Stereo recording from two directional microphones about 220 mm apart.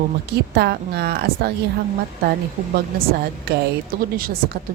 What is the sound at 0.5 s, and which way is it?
A woman's voice, 45° right (ahead or behind).